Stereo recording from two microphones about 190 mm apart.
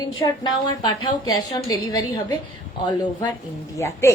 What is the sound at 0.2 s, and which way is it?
A woman's voice, 20° left (ahead or behind).